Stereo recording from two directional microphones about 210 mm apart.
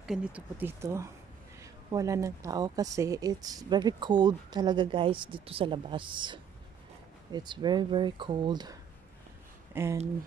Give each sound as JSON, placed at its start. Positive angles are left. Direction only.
{"t": 0.0, "sound": "speech", "side_deg": -5}
{"t": 9.8, "sound": "speech", "side_deg": -10}